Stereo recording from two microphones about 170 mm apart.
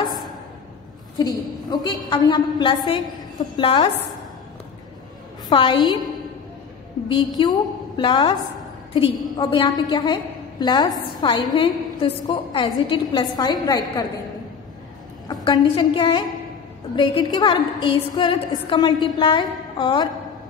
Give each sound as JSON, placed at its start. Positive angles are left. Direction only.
{"t": 1.1, "sound": "a woman's voice", "side_deg": 25}
{"t": 5.5, "sound": "a woman's voice", "side_deg": 30}
{"t": 7.1, "sound": "a woman's voice", "side_deg": 25}
{"t": 15.4, "sound": "a woman's voice", "side_deg": 30}